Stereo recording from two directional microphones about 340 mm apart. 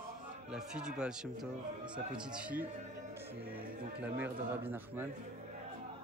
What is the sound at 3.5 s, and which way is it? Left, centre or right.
Speech, right.